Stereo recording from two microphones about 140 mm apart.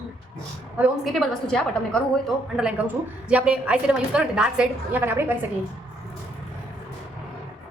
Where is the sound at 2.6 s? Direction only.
10° right (ahead or behind).